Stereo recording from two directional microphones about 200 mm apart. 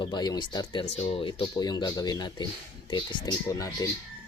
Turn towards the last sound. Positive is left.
turn(degrees=20)  # may be behind; listen again after turning